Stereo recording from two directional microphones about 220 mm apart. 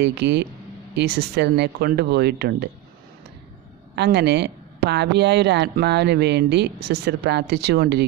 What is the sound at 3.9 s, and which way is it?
Speech, 50° right (ahead or behind).